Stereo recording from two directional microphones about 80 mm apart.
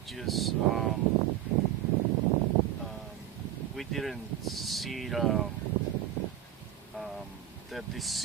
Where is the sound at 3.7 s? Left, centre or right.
Centre.